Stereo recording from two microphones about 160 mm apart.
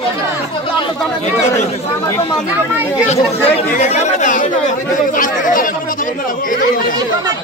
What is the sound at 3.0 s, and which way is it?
Speech, 40° left (ahead or behind).